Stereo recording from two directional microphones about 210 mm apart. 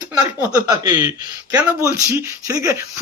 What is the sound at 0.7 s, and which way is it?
A man's voice, 15° right (ahead or behind).